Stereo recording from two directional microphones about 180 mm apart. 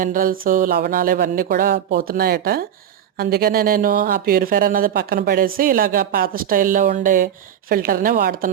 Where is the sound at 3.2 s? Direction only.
55° right (ahead or behind).